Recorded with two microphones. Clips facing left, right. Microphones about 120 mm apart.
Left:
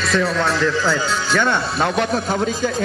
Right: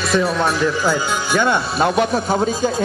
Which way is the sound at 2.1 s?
40° right (ahead or behind).